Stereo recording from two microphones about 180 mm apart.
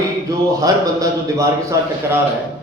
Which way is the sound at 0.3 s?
15° right (ahead or behind).